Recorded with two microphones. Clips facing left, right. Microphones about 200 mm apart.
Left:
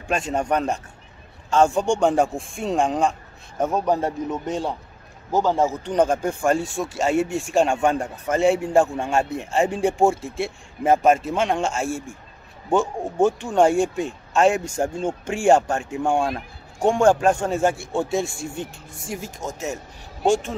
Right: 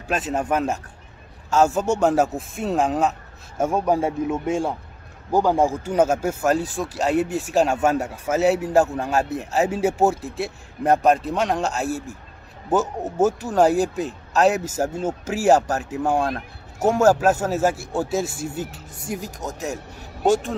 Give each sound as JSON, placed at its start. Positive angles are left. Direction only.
{"t": 0.1, "sound": "speech", "side_deg": -5}